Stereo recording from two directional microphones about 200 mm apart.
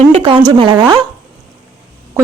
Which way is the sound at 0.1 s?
25° right (ahead or behind).